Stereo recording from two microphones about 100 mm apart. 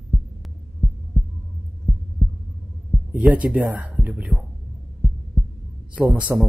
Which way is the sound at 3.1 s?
15° right (ahead or behind).